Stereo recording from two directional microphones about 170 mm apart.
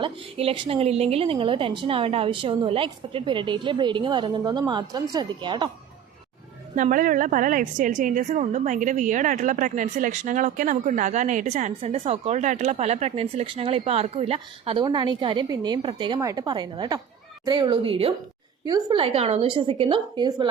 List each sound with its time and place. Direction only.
0.0 s a woman's voice: 30° right (ahead or behind)
6.7 s a woman's voice: 50° right (ahead or behind); by 20.5 s 30° right (ahead or behind)